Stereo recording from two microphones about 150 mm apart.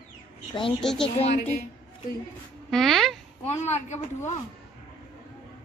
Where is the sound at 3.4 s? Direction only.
45° left (ahead or behind).